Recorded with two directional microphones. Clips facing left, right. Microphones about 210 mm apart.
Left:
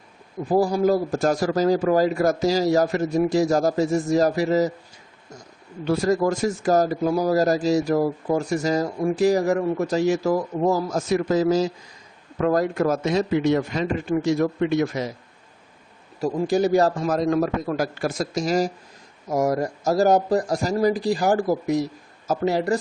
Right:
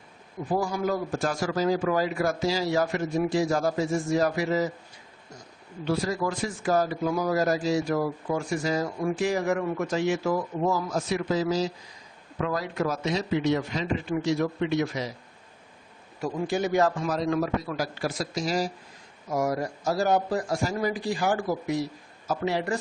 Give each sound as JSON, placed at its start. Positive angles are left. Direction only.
{"t": 0.5, "sound": "a man's voice", "side_deg": 35}
{"t": 5.8, "sound": "a man's voice", "side_deg": 45}
{"t": 16.2, "sound": "a man's voice", "side_deg": 35}